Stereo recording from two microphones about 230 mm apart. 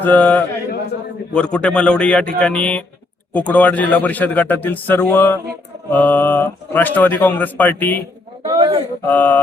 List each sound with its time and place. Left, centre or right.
0.0 s speech: centre
8.4 s a sound: right
9.0 s speech: centre